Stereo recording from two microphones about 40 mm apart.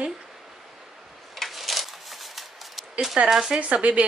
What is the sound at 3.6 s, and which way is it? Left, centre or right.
Speech, right.